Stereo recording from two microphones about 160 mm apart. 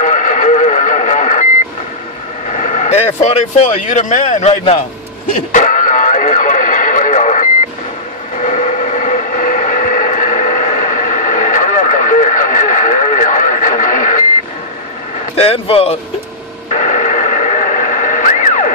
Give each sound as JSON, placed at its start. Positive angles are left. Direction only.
{"t": 0.0, "sound": "radio", "side_deg": 50}
{"t": 2.5, "sound": "speech", "side_deg": 45}
{"t": 5.5, "sound": "radio", "side_deg": 55}
{"t": 8.4, "sound": "train", "side_deg": 45}
{"t": 15.3, "sound": "speech", "side_deg": 35}
{"t": 16.7, "sound": "radio", "side_deg": 45}